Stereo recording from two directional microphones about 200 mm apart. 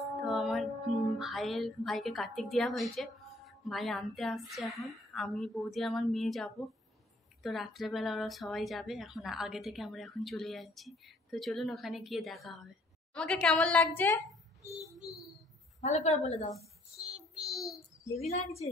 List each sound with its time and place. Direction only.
0.2 s music: centre (ahead or behind)
1.1 s a woman's voice: centre (ahead or behind)
15.8 s a woman's voice: 35° left (ahead or behind)
16.5 s child singing: 5° right (ahead or behind)
18.1 s a woman's voice: 30° left (ahead or behind)